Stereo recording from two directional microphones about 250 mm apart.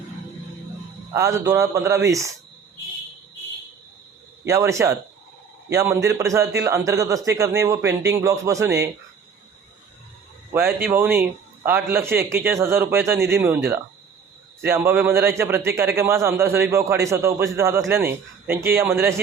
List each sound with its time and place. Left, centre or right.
1.1 s speech: centre
4.4 s speech: centre
10.5 s speech: centre